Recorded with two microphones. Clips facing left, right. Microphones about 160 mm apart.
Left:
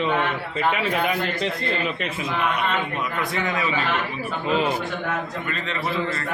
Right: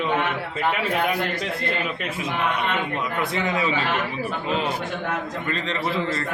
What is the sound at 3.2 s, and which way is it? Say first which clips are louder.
Speech: right 2 dB; 30° right (ahead or behind).